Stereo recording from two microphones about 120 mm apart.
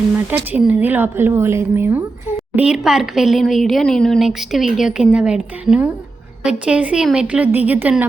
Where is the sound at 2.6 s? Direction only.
5° right (ahead or behind).